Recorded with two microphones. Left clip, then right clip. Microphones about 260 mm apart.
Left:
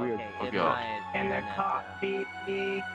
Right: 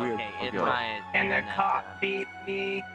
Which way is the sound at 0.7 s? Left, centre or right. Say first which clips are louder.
Right 4 dB; right.